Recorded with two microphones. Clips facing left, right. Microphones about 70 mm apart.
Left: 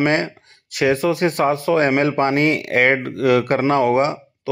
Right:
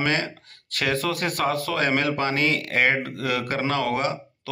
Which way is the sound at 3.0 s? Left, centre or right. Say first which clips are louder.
Left 5 dB; left.